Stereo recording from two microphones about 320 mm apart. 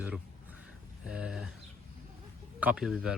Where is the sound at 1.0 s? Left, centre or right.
Centre.